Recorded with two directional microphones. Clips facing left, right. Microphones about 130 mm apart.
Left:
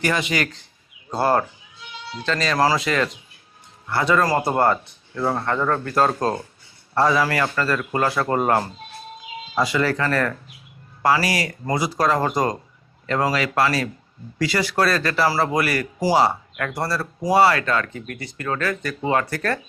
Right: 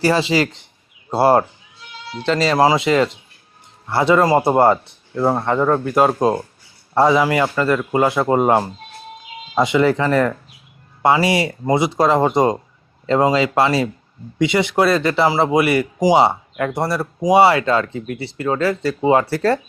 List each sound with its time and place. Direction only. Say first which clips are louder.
0.0 s speech: right 6 dB; 30° right (ahead or behind)